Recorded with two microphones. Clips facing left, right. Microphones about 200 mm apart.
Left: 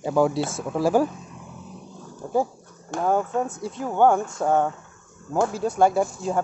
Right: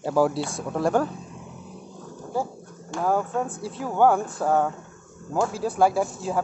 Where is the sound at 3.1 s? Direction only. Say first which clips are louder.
Left 2 dB; centre (ahead or behind).